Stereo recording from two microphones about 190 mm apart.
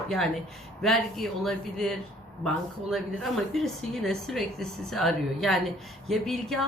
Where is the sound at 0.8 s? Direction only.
Centre (ahead or behind).